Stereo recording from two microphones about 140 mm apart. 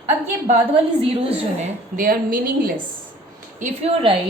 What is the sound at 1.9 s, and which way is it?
Speech, 90° right.